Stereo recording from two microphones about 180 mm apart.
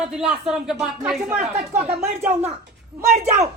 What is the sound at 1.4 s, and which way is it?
Speech, 35° right (ahead or behind).